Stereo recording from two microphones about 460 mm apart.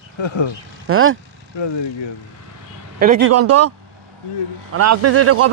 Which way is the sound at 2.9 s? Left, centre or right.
Centre.